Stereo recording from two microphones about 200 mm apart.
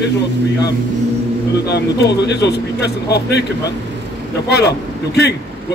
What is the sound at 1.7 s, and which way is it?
Speech, 55° left (ahead or behind).